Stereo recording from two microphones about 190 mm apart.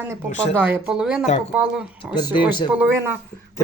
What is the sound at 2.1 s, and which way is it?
Speech, 20° left (ahead or behind).